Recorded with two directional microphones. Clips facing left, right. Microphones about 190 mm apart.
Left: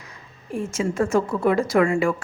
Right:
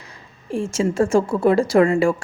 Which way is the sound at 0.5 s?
30° right (ahead or behind).